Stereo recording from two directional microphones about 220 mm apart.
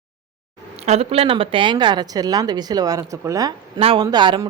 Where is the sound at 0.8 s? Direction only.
30° right (ahead or behind).